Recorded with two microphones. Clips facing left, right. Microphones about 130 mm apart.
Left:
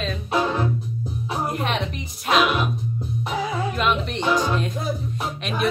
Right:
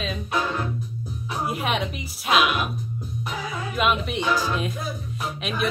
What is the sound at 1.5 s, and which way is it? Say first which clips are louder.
Music: right 2 dB; 5° right (ahead or behind).